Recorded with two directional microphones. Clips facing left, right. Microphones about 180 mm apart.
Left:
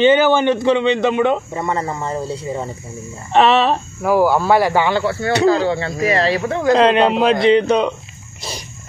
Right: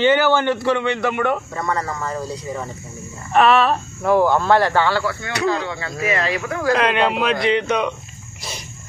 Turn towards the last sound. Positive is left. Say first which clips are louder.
# left 6 dB
turn(degrees=30)  # may be behind; listen again after turning